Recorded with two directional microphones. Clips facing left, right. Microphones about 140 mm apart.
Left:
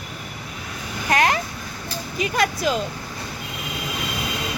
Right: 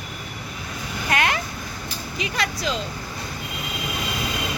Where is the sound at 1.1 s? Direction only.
35° left (ahead or behind).